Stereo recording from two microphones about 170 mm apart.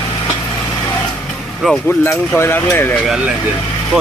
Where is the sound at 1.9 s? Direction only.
10° left (ahead or behind).